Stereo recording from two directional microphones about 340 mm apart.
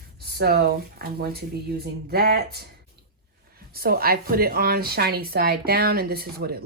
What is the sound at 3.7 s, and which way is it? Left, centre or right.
A woman's voice, right.